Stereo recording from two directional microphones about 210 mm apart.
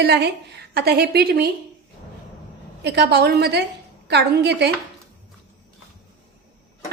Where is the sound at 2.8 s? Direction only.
50° right (ahead or behind).